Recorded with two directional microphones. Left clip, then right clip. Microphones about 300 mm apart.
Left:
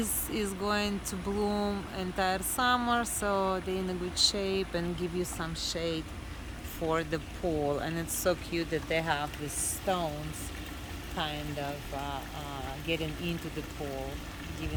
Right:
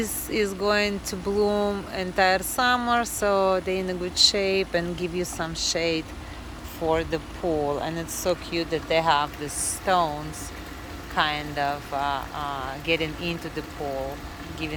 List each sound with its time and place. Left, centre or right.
0.0 s speech: centre
11.2 s speech: centre